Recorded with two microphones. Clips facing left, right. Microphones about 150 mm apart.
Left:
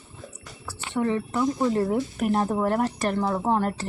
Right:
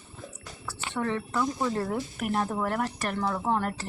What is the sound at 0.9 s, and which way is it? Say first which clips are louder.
Speech: left 4 dB; 15° left (ahead or behind).